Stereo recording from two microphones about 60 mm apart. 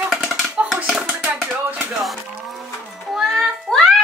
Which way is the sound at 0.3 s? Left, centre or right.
Centre.